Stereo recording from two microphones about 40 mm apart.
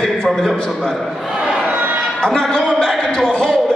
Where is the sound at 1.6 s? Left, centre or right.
Right.